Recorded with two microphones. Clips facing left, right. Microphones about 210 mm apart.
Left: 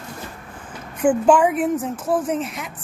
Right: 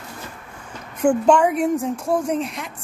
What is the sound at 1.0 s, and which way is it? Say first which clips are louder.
A woman's voice: even; 5° left (ahead or behind).